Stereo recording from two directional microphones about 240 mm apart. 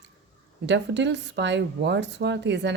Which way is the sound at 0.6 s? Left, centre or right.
Right.